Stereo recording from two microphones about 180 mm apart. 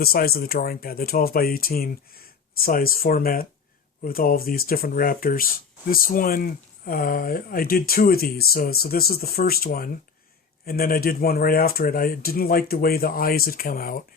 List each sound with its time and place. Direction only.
0.0 s speech: 60° left (ahead or behind)